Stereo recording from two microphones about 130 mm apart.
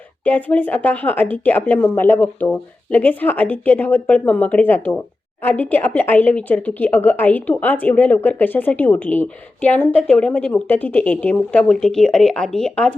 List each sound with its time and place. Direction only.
0.3 s speech: 15° left (ahead or behind)